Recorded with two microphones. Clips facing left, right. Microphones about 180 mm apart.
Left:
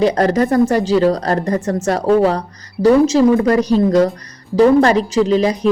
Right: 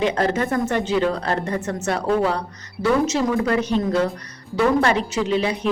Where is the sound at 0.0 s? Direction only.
35° left (ahead or behind).